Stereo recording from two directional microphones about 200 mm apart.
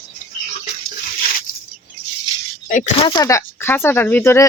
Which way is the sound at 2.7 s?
40° left (ahead or behind).